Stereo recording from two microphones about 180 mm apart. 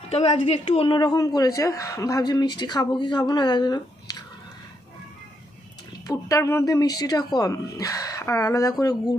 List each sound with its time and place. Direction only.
0.1 s a woman's voice: 30° left (ahead or behind)
6.1 s a woman's voice: 20° left (ahead or behind)